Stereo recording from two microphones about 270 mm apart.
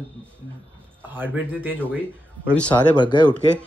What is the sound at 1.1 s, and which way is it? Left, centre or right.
Speech, centre.